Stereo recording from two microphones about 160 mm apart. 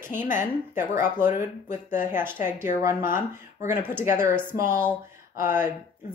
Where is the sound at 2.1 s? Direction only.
15° right (ahead or behind).